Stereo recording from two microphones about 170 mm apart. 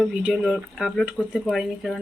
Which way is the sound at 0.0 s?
5° right (ahead or behind).